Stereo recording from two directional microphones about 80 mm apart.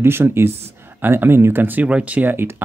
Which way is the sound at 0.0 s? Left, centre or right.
Right.